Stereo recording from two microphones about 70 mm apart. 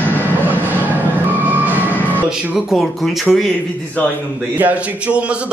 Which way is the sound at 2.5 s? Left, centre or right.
Centre.